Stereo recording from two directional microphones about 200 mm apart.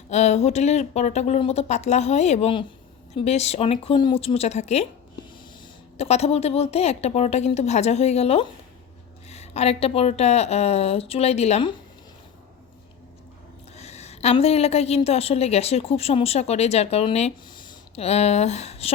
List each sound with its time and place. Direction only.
0.1 s a woman's voice: 35° left (ahead or behind)
6.0 s a woman's voice: 30° left (ahead or behind)
13.7 s a woman's voice: 35° left (ahead or behind)